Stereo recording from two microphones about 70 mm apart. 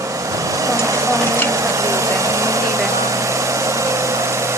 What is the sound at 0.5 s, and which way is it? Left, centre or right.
Vehicle, right.